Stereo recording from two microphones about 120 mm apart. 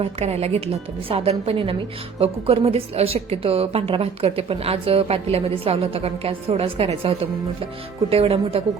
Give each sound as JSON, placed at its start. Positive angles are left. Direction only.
{"t": 0.0, "sound": "a woman's voice", "side_deg": -60}